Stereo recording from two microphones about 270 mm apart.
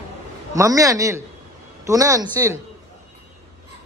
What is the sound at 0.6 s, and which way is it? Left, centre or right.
Speech, centre.